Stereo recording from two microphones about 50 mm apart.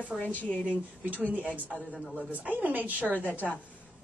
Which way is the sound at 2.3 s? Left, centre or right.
Right.